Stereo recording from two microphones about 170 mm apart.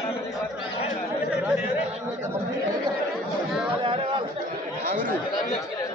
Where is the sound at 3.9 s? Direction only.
30° right (ahead or behind).